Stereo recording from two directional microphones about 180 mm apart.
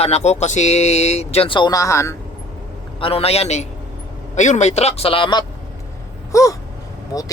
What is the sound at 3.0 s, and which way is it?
Speech, 35° left (ahead or behind).